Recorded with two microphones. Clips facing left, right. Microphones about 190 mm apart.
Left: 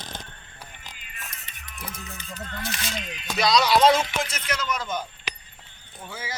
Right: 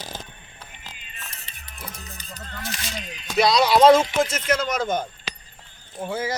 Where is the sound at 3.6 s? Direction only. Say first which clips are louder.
Right 4 dB; 30° right (ahead or behind).